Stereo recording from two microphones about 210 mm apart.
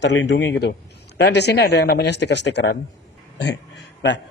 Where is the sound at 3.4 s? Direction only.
55° left (ahead or behind).